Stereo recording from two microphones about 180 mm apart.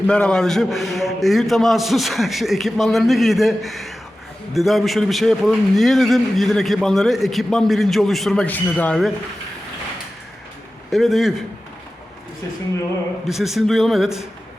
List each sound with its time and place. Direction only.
0.1 s a man's voice: 5° left (ahead or behind)
10.9 s a man's voice: centre (ahead or behind)
13.2 s a man's voice: centre (ahead or behind)